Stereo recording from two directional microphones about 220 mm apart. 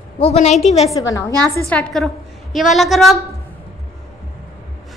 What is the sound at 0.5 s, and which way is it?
Speech, centre (ahead or behind).